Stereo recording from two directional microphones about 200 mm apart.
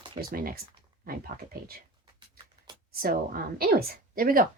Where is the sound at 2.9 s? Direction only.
45° right (ahead or behind).